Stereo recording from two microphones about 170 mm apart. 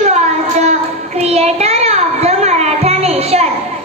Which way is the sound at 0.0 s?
40° right (ahead or behind).